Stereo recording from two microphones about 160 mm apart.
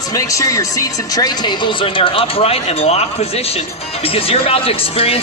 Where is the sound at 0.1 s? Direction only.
20° left (ahead or behind).